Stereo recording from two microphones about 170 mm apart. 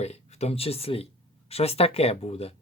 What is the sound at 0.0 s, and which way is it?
Speech, 40° left (ahead or behind).